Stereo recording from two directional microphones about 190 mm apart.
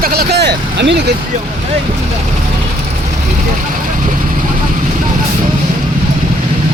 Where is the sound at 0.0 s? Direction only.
55° right (ahead or behind).